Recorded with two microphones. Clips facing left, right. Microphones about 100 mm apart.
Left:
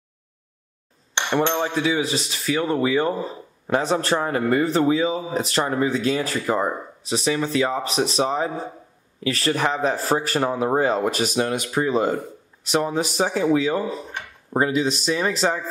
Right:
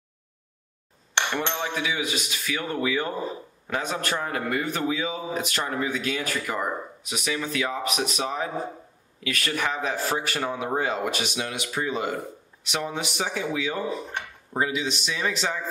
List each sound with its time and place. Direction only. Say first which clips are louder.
1.6 s a man's voice: left 6 dB; 35° left (ahead or behind)